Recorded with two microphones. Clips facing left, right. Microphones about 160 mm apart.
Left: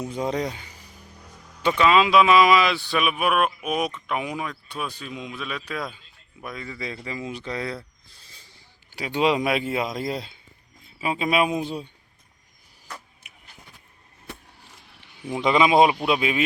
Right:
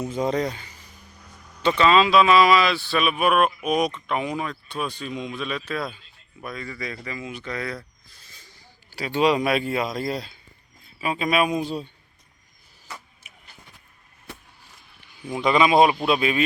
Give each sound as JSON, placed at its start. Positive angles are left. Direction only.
{"t": 0.0, "sound": "speech", "side_deg": 0}
{"t": 0.4, "sound": "speech", "side_deg": 15}
{"t": 7.1, "sound": "speech", "side_deg": 30}
{"t": 8.1, "sound": "a sound", "side_deg": 30}
{"t": 8.9, "sound": "a man's voice", "side_deg": 15}
{"t": 15.2, "sound": "a man's voice", "side_deg": 20}